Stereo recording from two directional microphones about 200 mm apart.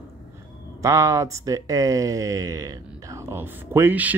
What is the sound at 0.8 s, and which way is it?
Speech, 15° right (ahead or behind).